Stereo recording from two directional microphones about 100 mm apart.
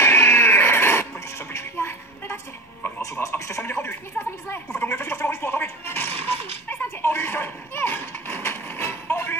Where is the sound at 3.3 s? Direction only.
20° left (ahead or behind).